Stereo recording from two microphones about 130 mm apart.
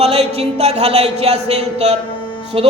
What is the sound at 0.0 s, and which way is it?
Speech, 55° right (ahead or behind).